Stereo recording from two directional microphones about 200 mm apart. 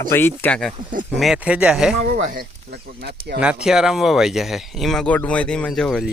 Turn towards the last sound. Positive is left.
turn(degrees=5)  # may be behind; listen again after turning